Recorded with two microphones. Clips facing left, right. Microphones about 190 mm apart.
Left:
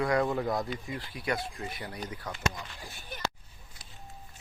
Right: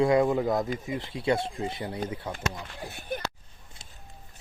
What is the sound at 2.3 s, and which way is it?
Speech, 60° right (ahead or behind).